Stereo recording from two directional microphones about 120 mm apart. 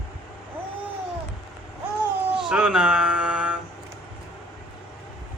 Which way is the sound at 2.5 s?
5° right (ahead or behind).